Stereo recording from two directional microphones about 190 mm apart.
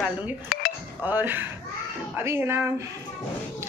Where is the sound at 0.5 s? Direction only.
50° left (ahead or behind).